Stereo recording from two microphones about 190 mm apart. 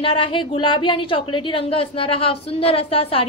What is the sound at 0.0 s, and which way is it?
A woman's voice, 25° left (ahead or behind).